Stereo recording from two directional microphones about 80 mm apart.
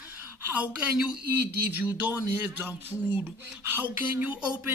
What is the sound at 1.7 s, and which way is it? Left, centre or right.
Speech, right.